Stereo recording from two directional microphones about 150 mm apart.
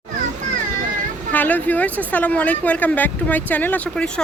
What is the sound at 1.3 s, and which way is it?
Speech, 10° left (ahead or behind).